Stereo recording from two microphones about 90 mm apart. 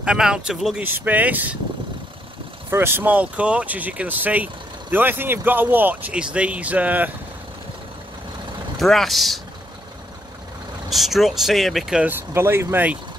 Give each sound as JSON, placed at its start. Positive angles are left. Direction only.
{"t": 0.0, "sound": "speech", "side_deg": -10}
{"t": 0.8, "sound": "speech", "side_deg": -20}
{"t": 2.7, "sound": "speech", "side_deg": -25}
{"t": 8.7, "sound": "speech", "side_deg": 0}
{"t": 10.9, "sound": "speech", "side_deg": 0}
{"t": 12.1, "sound": "speech", "side_deg": -25}